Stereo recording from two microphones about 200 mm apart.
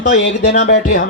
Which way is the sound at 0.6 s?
55° left (ahead or behind).